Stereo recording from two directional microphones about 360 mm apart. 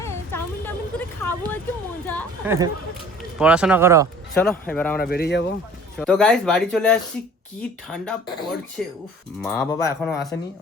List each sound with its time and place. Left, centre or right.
0.0 s a sound: centre
2.0 s a woman's voice: centre
4.4 s speech: centre
4.9 s speech: left
6.0 s speech: centre